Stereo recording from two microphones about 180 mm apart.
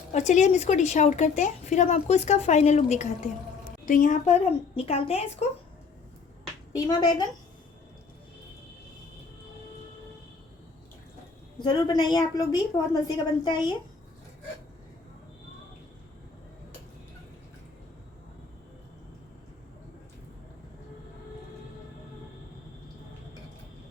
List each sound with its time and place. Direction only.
0.1 s a woman's voice: 40° left (ahead or behind)
4.7 s a woman's voice: 30° left (ahead or behind)
6.7 s a woman's voice: 25° left (ahead or behind)
11.6 s a woman's voice: 20° left (ahead or behind)